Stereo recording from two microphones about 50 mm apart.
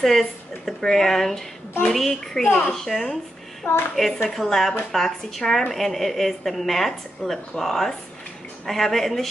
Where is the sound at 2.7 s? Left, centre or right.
Centre.